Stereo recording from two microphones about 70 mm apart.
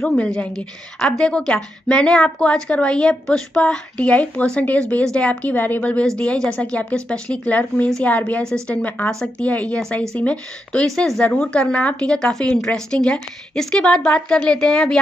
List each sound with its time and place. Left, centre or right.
0.2 s a woman's voice: centre